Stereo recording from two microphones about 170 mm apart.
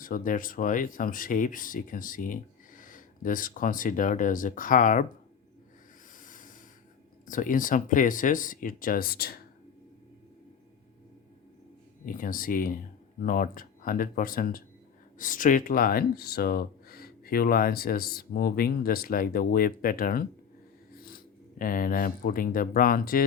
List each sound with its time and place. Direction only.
0.0 s speech: 55° left (ahead or behind)
6.1 s snort: 50° left (ahead or behind)
7.3 s speech: 50° left (ahead or behind)
12.0 s speech: 55° left (ahead or behind)
20.9 s dog: 60° left (ahead or behind)
21.6 s speech: 55° left (ahead or behind)